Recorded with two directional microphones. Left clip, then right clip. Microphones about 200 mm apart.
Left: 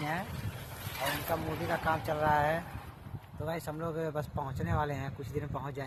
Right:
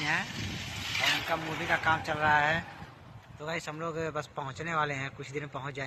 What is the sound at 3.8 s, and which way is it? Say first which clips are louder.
Speech: even; 30° left (ahead or behind).